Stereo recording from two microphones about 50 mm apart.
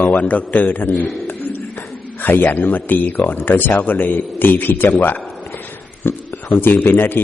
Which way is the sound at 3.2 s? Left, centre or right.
Left.